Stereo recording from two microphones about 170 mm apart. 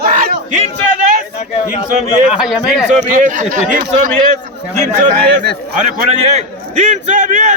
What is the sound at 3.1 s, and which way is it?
Speech, 50° right (ahead or behind).